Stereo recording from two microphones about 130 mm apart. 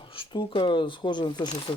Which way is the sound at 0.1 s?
40° left (ahead or behind).